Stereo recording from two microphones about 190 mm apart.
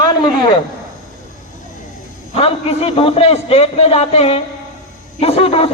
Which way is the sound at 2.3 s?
30° left (ahead or behind).